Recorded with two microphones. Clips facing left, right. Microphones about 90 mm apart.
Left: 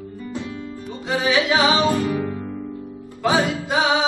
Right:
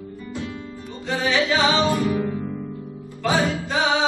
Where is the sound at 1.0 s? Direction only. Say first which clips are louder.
Left 2 dB; 10° left (ahead or behind).